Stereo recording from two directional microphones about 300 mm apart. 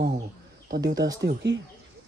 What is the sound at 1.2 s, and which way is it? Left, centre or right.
Speech, right.